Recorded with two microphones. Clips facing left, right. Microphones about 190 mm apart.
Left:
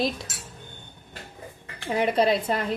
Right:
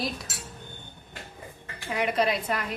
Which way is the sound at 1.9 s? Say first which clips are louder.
Left 4 dB; 30° left (ahead or behind).